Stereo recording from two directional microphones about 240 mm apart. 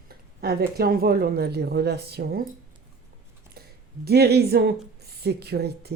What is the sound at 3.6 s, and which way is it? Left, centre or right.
Speech, right.